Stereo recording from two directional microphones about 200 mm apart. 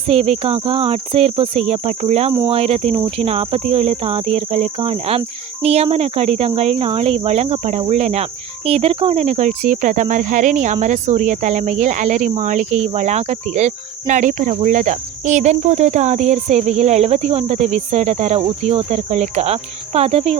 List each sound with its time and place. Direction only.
0.1 s speech: 30° right (ahead or behind)
2.5 s cricket: 30° right (ahead or behind)
3.7 s speech: 30° right (ahead or behind)